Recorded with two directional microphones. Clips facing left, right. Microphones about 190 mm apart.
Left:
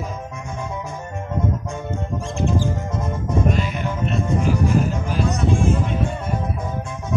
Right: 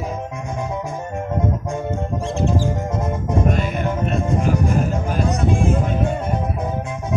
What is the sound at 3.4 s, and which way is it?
Music, 50° right (ahead or behind).